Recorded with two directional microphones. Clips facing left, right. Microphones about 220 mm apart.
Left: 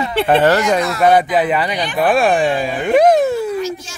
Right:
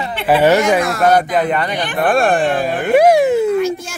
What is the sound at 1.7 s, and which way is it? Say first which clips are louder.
Speech: even; 55° right (ahead or behind).